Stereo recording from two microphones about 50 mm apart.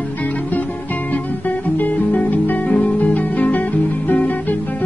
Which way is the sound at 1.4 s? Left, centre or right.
Left.